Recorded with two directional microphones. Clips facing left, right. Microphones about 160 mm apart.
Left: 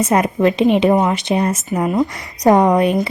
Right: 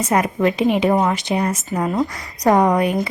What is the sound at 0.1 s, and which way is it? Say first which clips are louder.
A woman's voice: even; 20° left (ahead or behind).